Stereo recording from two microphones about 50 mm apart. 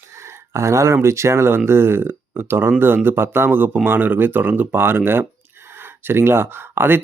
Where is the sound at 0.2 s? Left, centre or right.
Right.